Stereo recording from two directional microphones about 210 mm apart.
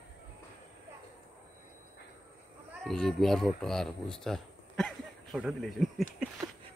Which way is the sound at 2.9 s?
Centre (ahead or behind).